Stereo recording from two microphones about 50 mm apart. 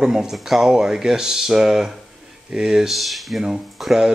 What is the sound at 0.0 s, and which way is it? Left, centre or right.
Speech, centre.